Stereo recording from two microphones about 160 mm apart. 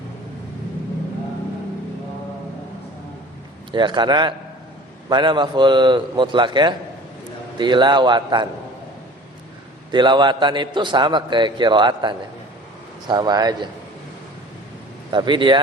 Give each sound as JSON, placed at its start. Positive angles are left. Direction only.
{"t": 3.7, "sound": "a man's voice", "side_deg": -30}
{"t": 9.9, "sound": "a man's voice", "side_deg": -30}
{"t": 15.1, "sound": "a man's voice", "side_deg": -30}